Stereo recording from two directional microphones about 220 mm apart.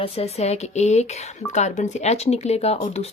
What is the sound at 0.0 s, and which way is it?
Speech, 25° left (ahead or behind).